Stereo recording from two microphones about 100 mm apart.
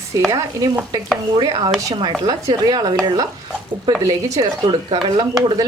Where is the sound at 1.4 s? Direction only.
55° right (ahead or behind).